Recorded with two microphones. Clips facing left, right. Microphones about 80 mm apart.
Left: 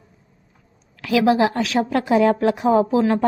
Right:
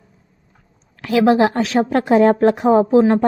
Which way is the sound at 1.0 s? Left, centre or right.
Right.